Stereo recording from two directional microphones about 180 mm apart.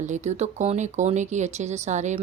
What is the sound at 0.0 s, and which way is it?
A woman's voice, 40° right (ahead or behind).